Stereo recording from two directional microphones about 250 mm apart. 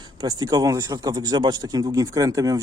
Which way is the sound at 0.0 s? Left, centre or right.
Centre.